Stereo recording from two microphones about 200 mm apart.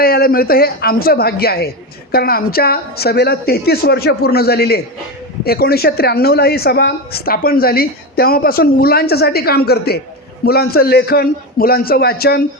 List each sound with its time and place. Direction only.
0.0 s speech: 50° left (ahead or behind)